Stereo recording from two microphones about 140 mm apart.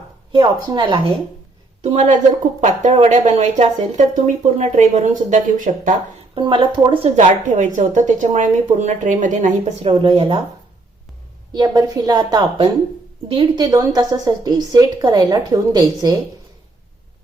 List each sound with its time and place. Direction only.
0.3 s a woman's voice: 35° right (ahead or behind)
1.8 s a woman's voice: 55° right (ahead or behind)
6.3 s a woman's voice: 35° right (ahead or behind)
7.2 s speech: 60° right (ahead or behind)
9.8 s a woman's voice: 40° right (ahead or behind)
11.5 s a woman's voice: 30° right (ahead or behind)